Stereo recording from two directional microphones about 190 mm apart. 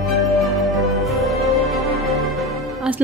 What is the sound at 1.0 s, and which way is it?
Music, centre (ahead or behind).